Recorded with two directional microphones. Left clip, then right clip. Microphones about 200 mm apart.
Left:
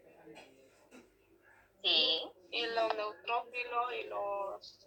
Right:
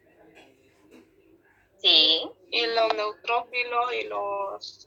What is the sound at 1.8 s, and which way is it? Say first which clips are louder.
Speech: right 11 dB; 35° right (ahead or behind).